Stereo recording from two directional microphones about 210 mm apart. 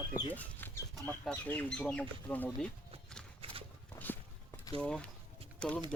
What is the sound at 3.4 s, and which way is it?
Horse, 25° right (ahead or behind).